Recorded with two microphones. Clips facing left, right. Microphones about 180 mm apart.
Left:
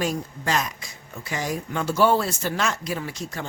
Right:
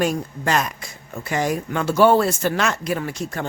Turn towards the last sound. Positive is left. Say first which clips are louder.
# right 5 dB
turn(degrees=-55)  # may be behind; listen again after turning